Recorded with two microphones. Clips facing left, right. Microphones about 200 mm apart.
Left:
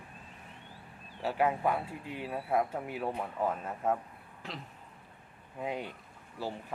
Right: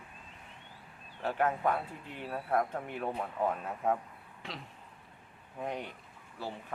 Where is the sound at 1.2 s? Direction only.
10° left (ahead or behind).